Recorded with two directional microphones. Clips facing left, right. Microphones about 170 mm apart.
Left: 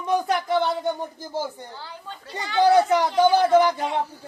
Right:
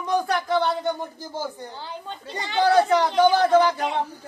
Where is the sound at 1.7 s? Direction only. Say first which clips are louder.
Right 3 dB; 20° right (ahead or behind).